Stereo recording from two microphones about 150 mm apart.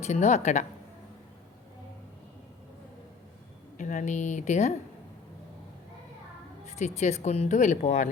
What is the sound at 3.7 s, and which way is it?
Speech, 55° left (ahead or behind).